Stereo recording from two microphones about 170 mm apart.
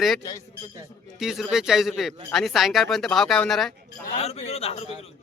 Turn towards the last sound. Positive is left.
turn(degrees=35)  # may be behind; listen again after turning